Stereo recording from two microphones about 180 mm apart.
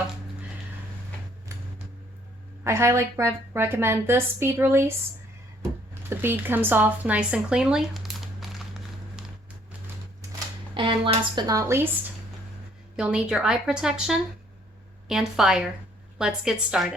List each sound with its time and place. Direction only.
1.5 s vehicle: 15° right (ahead or behind)
2.6 s a woman's voice: 15° right (ahead or behind)
10.8 s a woman's voice: 30° right (ahead or behind)
13.0 s a woman's voice: 5° right (ahead or behind)